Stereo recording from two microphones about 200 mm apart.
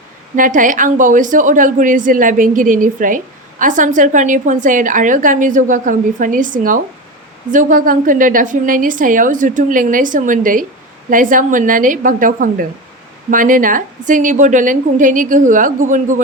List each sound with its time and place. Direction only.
0.3 s a woman's voice: 40° right (ahead or behind)